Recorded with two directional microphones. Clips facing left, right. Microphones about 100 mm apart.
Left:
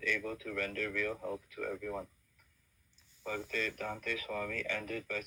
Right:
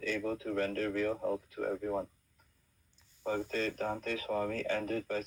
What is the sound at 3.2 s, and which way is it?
Speech, 35° right (ahead or behind).